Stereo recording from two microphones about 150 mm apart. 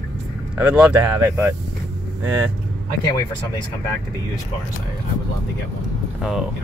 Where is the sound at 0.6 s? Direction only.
10° right (ahead or behind).